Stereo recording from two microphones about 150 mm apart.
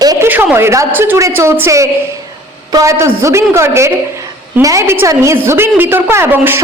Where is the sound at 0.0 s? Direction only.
25° right (ahead or behind).